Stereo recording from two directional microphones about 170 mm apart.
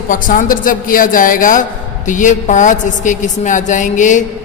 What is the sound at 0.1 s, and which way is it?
A man's voice, 50° left (ahead or behind).